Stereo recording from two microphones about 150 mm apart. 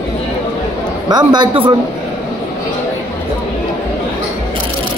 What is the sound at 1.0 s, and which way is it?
Speech, 30° right (ahead or behind).